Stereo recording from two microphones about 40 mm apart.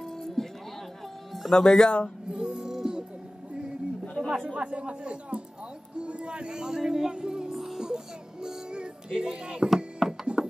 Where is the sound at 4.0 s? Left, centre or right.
Left.